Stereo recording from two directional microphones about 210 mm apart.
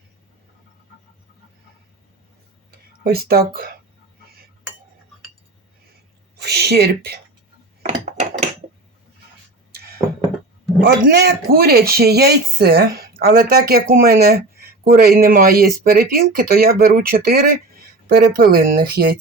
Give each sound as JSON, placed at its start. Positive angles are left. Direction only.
{"t": 3.0, "sound": "speech", "side_deg": -45}
{"t": 6.4, "sound": "speech", "side_deg": -50}
{"t": 7.8, "sound": "a sound", "side_deg": -35}
{"t": 10.8, "sound": "speech", "side_deg": -55}